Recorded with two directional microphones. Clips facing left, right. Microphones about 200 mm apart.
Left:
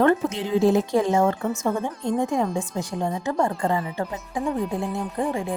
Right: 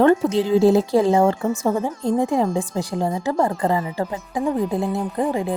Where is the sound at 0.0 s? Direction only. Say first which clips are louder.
Right 4 dB; 35° right (ahead or behind).